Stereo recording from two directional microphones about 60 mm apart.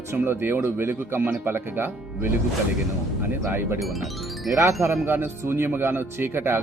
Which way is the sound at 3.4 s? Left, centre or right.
Right.